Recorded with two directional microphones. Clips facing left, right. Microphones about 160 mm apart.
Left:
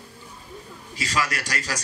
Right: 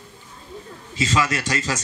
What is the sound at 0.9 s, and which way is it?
Speech, 25° right (ahead or behind).